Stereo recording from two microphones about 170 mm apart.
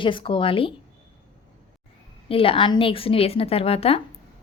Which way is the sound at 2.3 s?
30° left (ahead or behind).